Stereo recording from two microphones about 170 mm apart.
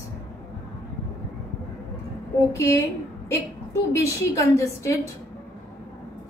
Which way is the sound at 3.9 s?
15° left (ahead or behind).